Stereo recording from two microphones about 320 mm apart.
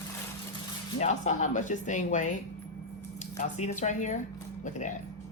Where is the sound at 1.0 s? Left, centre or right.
Left.